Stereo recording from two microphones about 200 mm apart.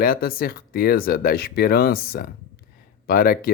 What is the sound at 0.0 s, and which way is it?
Speech, 45° left (ahead or behind).